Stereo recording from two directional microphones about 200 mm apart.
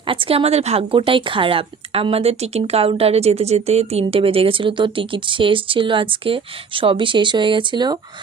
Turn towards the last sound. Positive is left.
turn(degrees=-20)  # may be behind; listen again after turning